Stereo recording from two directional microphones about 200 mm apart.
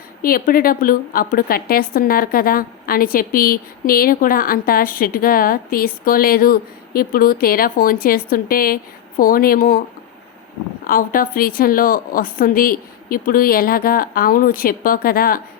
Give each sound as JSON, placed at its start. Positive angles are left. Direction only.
{"t": 0.2, "sound": "a woman's voice", "side_deg": 45}
{"t": 10.8, "sound": "a woman's voice", "side_deg": 45}